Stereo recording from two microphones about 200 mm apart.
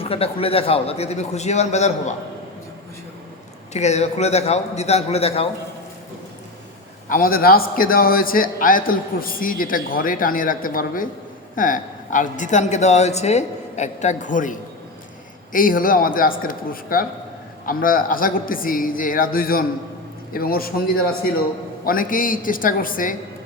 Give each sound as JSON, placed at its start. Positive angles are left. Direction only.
{"t": 0.0, "sound": "a woman's voice", "side_deg": 30}
{"t": 3.7, "sound": "a woman's voice", "side_deg": 35}
{"t": 7.1, "sound": "a man's voice", "side_deg": 45}
{"t": 15.5, "sound": "a man's voice", "side_deg": 45}
{"t": 21.8, "sound": "a man's voice", "side_deg": 45}